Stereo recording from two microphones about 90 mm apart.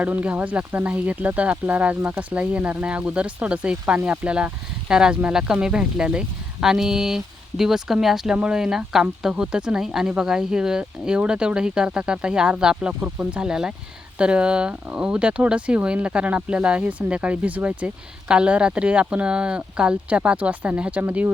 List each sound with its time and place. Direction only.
0.0 s speech: 15° right (ahead or behind)